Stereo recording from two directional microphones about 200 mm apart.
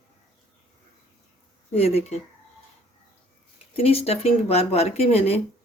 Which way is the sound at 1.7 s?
30° left (ahead or behind).